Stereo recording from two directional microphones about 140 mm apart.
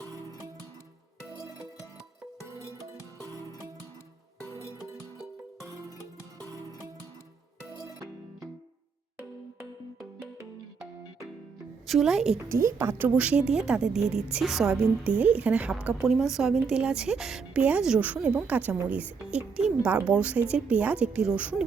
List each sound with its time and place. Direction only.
2.7 s music: 25° right (ahead or behind)
5.6 s music: 25° right (ahead or behind)
11.9 s a woman's voice: centre (ahead or behind)
12.5 s a woman's voice: 20° right (ahead or behind)